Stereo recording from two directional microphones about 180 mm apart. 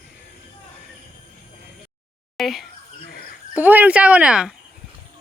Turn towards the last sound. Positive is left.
turn(degrees=-5)  # may be behind; listen again after turning